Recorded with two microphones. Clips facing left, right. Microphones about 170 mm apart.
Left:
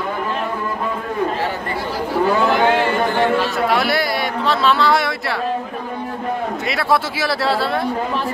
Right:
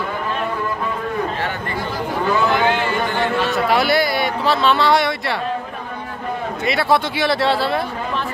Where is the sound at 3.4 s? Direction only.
Centre (ahead or behind).